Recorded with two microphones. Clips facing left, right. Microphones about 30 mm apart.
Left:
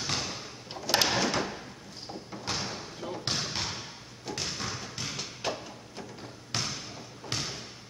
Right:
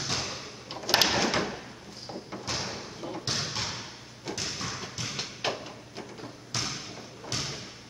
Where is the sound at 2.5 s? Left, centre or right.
Centre.